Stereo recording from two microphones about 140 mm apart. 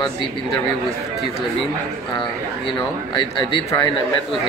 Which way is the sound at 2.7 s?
35° left (ahead or behind).